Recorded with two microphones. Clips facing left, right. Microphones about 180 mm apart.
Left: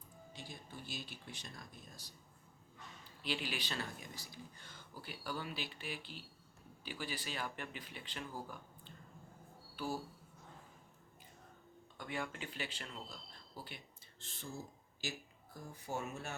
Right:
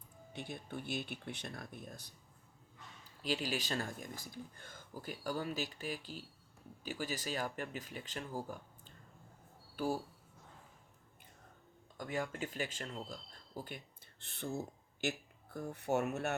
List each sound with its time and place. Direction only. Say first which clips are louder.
0.3 s speech: right 8 dB; 60° right (ahead or behind)
3.2 s speech: right 4 dB; 40° right (ahead or behind)
11.9 s speech: right 4 dB; 40° right (ahead or behind); by 16.3 s 65° right (ahead or behind)